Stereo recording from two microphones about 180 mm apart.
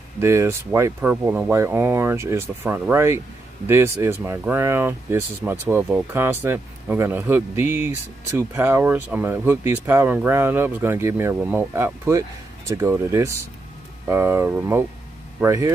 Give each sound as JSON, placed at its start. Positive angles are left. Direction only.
{"t": 0.2, "sound": "speech", "side_deg": -15}